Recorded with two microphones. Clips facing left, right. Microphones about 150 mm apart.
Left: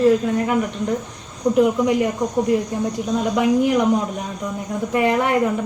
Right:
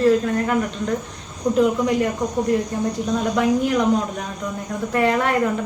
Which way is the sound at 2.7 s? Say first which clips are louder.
Even; 15° left (ahead or behind).